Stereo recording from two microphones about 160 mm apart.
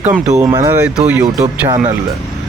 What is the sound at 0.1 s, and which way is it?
Speech, 20° right (ahead or behind).